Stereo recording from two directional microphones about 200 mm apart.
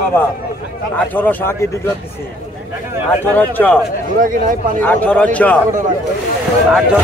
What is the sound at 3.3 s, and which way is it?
Speech, 10° left (ahead or behind).